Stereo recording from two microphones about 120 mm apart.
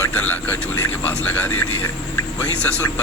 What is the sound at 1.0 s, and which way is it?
Speech, 15° left (ahead or behind).